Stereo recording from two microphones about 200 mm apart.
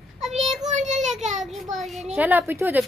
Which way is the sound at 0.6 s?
35° right (ahead or behind).